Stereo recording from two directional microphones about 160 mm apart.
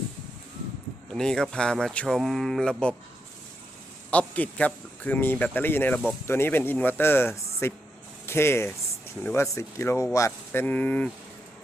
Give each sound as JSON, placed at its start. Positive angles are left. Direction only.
{"t": 1.1, "sound": "speech", "side_deg": 5}
{"t": 4.1, "sound": "speech", "side_deg": 10}